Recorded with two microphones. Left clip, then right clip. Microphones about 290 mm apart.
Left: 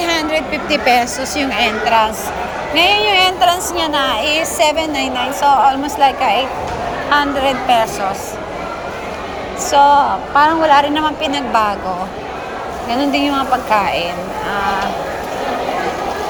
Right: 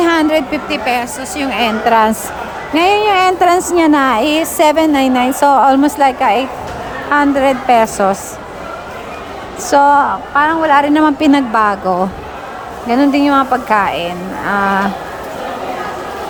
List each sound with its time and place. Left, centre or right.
0.0 s a woman's voice: centre
9.6 s a woman's voice: centre
13.1 s a woman's voice: centre